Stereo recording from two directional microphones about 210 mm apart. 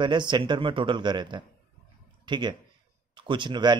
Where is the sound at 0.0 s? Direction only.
20° right (ahead or behind).